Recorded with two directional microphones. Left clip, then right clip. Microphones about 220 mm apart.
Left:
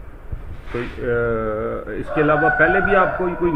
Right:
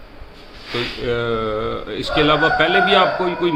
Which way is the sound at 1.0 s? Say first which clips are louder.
Left 2 dB; 15° right (ahead or behind).